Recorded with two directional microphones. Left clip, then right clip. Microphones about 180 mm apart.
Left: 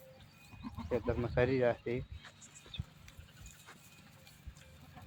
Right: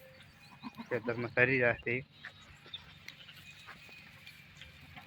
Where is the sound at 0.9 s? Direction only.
Centre (ahead or behind).